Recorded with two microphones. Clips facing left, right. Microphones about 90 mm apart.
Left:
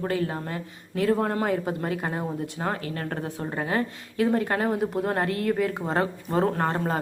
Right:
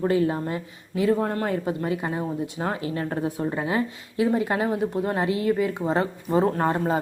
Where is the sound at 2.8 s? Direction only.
15° right (ahead or behind).